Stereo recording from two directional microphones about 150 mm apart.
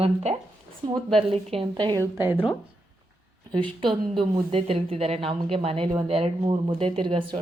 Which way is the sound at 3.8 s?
35° right (ahead or behind).